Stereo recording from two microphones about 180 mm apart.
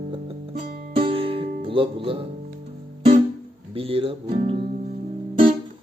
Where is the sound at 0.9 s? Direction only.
30° right (ahead or behind).